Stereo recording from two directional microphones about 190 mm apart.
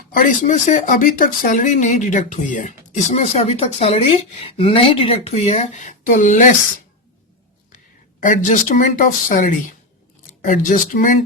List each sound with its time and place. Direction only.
0.2 s speech: 45° left (ahead or behind)
8.2 s speech: 45° left (ahead or behind)